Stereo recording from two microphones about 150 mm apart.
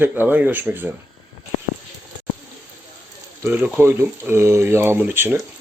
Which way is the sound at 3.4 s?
10° right (ahead or behind).